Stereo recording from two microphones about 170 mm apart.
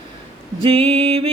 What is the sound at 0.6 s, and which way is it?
Mantra, 35° right (ahead or behind).